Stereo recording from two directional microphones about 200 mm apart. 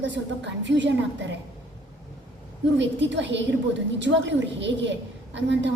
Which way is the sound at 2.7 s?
65° right (ahead or behind).